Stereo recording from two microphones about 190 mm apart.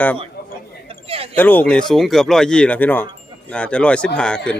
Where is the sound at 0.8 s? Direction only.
30° right (ahead or behind).